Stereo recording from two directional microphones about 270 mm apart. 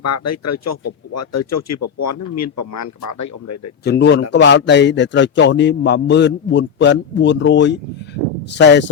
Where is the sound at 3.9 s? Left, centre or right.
Left.